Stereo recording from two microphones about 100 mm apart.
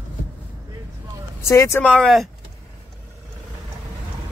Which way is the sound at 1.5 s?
30° left (ahead or behind).